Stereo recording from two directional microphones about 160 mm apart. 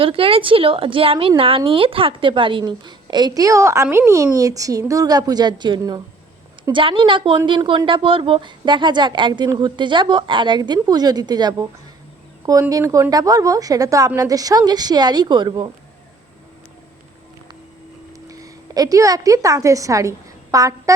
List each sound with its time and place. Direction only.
0.0 s a woman's voice: 35° right (ahead or behind)
18.3 s a woman's voice: 20° right (ahead or behind)